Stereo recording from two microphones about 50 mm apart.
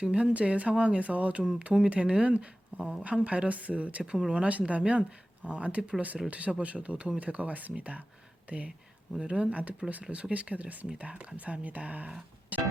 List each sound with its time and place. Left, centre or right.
0.0 s speech: right
4.4 s speech: right